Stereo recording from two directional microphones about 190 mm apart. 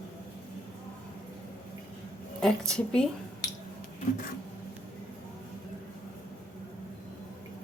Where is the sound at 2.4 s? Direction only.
5° left (ahead or behind).